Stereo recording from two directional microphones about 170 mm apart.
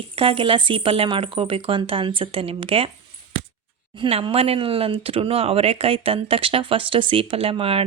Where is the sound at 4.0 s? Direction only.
35° right (ahead or behind).